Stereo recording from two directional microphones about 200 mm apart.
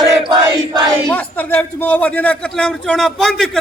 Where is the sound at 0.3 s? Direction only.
20° right (ahead or behind).